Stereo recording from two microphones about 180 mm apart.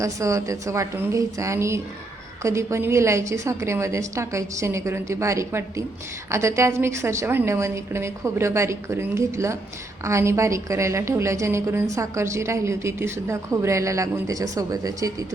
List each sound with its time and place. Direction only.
0.0 s a woman's voice: 15° right (ahead or behind)